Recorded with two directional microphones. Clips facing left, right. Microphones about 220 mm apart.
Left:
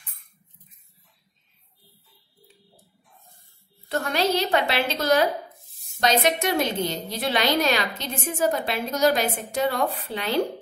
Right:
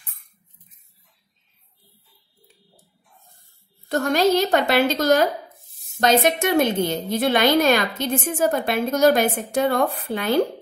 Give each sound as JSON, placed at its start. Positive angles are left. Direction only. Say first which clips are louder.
{"t": 3.9, "sound": "a woman's voice", "louder": "right 5 dB", "side_deg": -45}